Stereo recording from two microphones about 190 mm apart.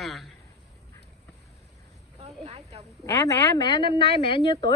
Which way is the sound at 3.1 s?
15° left (ahead or behind).